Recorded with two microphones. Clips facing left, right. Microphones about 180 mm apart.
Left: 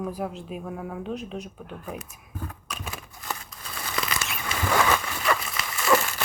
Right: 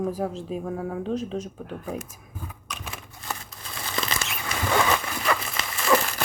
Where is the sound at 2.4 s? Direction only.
Centre (ahead or behind).